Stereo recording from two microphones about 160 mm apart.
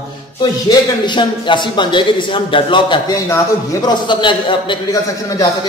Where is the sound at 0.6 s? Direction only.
30° left (ahead or behind).